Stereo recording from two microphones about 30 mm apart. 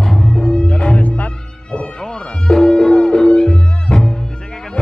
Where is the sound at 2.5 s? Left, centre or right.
Left.